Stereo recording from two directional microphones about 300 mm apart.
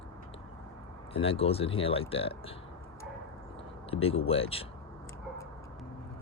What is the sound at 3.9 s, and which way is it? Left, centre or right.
Speech, centre.